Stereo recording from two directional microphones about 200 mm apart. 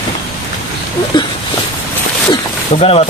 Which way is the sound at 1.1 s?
20° left (ahead or behind).